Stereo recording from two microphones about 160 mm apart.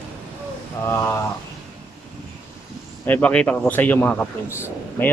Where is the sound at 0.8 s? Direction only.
15° left (ahead or behind).